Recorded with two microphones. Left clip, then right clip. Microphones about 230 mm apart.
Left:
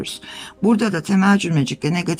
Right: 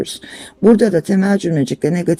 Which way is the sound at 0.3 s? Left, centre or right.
Centre.